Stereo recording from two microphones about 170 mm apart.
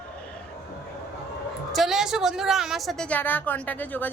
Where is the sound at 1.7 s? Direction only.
Centre (ahead or behind).